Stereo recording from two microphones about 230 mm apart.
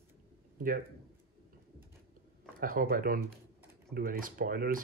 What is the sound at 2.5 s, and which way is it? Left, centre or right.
Speech, right.